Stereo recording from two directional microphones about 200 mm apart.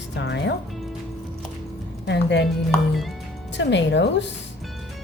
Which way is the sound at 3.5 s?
60° left (ahead or behind).